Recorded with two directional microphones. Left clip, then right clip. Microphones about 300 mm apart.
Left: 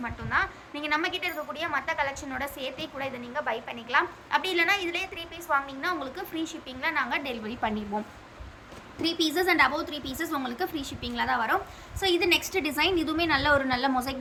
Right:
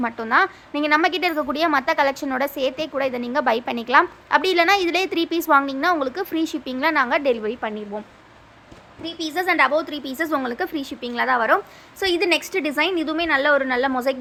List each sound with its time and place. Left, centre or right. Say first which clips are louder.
0.0 s a woman's voice: right 9 dB; centre